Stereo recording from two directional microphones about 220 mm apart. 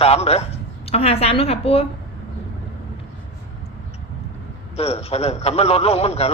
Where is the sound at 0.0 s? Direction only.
25° left (ahead or behind).